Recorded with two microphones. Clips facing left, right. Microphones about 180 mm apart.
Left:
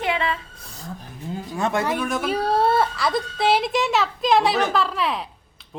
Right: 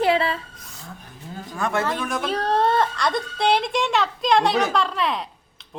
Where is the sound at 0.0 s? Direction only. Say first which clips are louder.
Right 4 dB; 35° right (ahead or behind).